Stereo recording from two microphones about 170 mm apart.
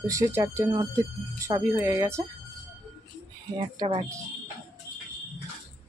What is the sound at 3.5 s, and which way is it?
Speech, 30° right (ahead or behind).